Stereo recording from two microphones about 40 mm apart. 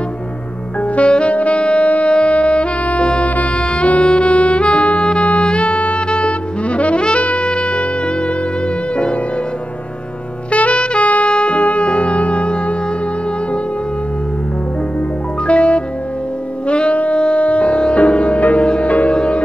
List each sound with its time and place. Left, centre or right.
0.7 s saxophone: left
3.3 s music: left
3.5 s saxophone: left
5.4 s music: left
10.5 s music: left
15.4 s music: left
16.6 s saxophone: left
17.2 s music: left